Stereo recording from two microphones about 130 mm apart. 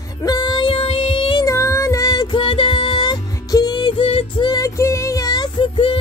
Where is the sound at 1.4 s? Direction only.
25° left (ahead or behind); by 4.4 s 45° left (ahead or behind).